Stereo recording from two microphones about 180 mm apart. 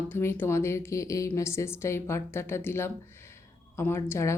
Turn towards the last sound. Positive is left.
turn(degrees=15)  # may be behind; listen again after turning